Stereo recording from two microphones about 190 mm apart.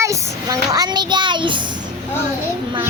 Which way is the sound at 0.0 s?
15° right (ahead or behind).